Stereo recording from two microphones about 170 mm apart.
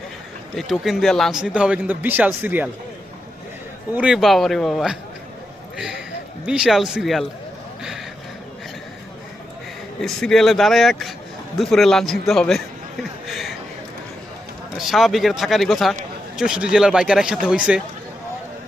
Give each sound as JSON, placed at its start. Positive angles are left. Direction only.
{"t": 0.5, "sound": "speech", "side_deg": 0}
{"t": 3.9, "sound": "speech", "side_deg": -5}
{"t": 6.4, "sound": "speech", "side_deg": -5}
{"t": 7.8, "sound": "a sound", "side_deg": 0}
{"t": 10.0, "sound": "a man's voice", "side_deg": 5}
{"t": 14.8, "sound": "speech", "side_deg": 0}